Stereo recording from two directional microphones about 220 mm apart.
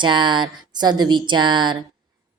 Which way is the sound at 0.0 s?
20° right (ahead or behind).